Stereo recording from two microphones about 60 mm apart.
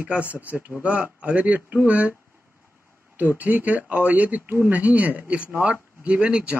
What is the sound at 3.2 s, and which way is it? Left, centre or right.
A man's voice, right.